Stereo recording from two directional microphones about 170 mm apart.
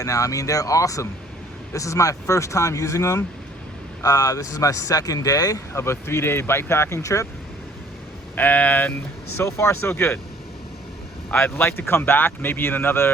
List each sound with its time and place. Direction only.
0.0 s speech: 20° left (ahead or behind)
8.4 s speech: 10° left (ahead or behind)
11.3 s speech: 10° left (ahead or behind)